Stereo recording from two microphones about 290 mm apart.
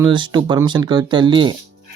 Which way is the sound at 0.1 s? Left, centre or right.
Centre.